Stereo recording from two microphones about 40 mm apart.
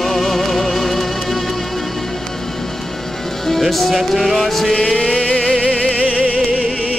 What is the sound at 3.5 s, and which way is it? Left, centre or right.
Music, centre.